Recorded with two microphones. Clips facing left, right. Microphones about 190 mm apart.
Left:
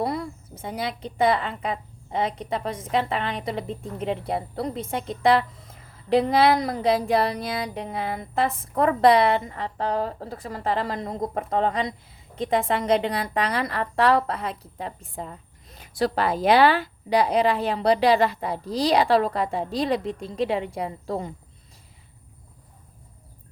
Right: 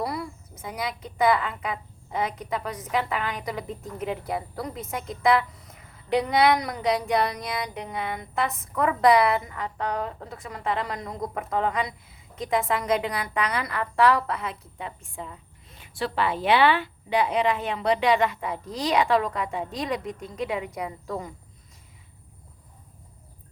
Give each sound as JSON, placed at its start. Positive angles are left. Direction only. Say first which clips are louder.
{"t": 0.0, "sound": "a woman's voice", "louder": "left 3 dB", "side_deg": 30}